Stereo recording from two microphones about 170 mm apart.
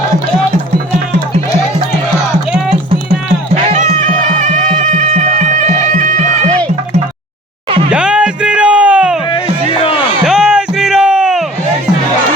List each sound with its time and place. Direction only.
3.5 s music: 40° right (ahead or behind)
7.9 s music: 5° right (ahead or behind)
9.3 s music: 30° left (ahead or behind)
10.2 s a sound: 5° right (ahead or behind)